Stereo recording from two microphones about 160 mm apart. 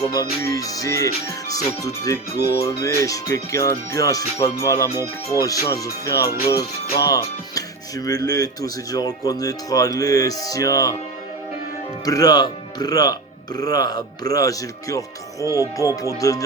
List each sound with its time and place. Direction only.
0.0 s speech: 20° left (ahead or behind)
12.0 s speech: 20° left (ahead or behind)